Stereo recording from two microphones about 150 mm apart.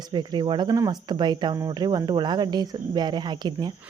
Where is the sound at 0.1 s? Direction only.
30° right (ahead or behind).